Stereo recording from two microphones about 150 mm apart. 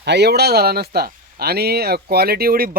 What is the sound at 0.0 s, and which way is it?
Speech, 90° right.